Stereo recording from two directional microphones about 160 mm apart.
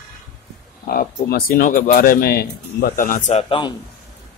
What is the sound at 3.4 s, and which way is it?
Speech, 35° left (ahead or behind).